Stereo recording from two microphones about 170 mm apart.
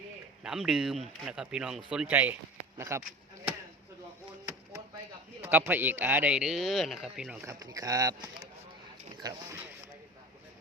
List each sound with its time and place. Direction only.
0.4 s speech: 5° right (ahead or behind)
5.4 s speech: 10° right (ahead or behind)
7.4 s speech: 20° right (ahead or behind)
9.2 s speech: 15° right (ahead or behind)